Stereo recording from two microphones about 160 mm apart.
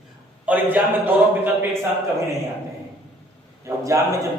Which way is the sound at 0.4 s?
10° right (ahead or behind).